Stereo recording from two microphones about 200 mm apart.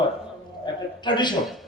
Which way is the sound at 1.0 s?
20° left (ahead or behind).